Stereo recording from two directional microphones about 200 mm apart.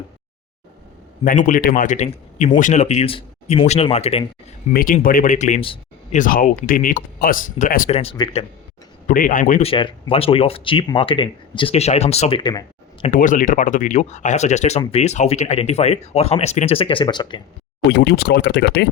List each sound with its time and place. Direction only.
1.2 s speech: 40° left (ahead or behind)
4.7 s speech: 45° left (ahead or behind); by 6.1 s 25° left (ahead or behind)
6.1 s speech: 40° left (ahead or behind)
7.9 s speech: 25° left (ahead or behind)
9.0 s speech: 45° left (ahead or behind)
9.6 s speech: 25° left (ahead or behind)
13.1 s speech: 40° left (ahead or behind); by 17.4 s 20° left (ahead or behind)
17.9 s speech: 60° left (ahead or behind)